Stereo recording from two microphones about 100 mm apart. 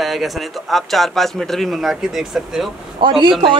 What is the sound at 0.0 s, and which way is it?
Speech, centre (ahead or behind).